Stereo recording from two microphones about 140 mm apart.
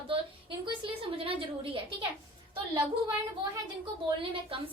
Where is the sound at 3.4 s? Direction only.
35° right (ahead or behind).